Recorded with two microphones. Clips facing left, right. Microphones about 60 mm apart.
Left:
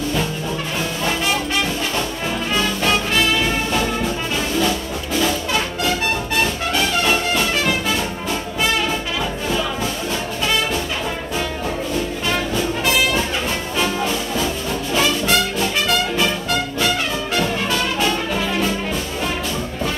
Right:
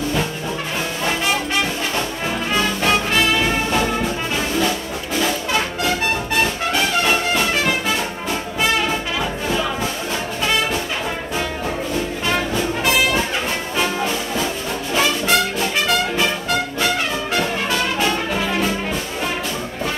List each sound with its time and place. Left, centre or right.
1.0 s music: right
10.4 s brass instrument: right
12.3 s music: right